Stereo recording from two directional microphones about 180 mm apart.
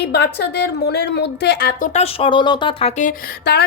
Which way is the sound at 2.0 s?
30° left (ahead or behind).